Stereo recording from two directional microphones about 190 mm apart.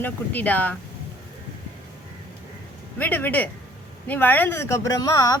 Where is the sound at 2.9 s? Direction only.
10° left (ahead or behind).